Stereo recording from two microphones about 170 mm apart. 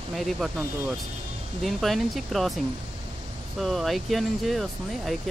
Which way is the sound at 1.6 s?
Centre (ahead or behind).